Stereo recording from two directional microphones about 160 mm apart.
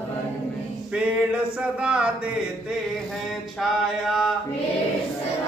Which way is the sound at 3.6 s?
Centre (ahead or behind).